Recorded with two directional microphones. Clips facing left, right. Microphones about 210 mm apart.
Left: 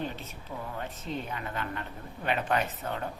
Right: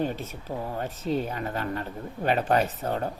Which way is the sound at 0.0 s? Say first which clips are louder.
Right 7 dB; 40° right (ahead or behind).